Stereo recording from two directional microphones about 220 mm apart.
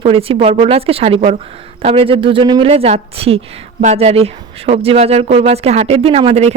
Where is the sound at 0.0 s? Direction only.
25° right (ahead or behind).